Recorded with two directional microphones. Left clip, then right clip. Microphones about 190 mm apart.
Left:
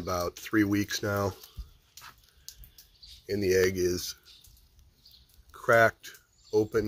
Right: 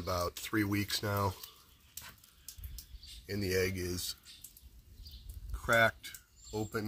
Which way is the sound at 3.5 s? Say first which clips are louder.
Left 8 dB; 25° left (ahead or behind).